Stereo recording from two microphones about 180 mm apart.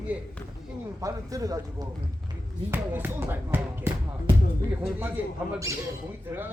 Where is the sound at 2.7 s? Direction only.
10° right (ahead or behind).